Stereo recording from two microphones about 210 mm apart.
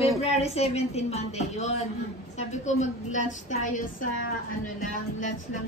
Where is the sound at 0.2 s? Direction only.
30° left (ahead or behind).